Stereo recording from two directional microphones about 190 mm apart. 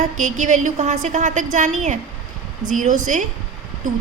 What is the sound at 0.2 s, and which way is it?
Speech, 40° right (ahead or behind).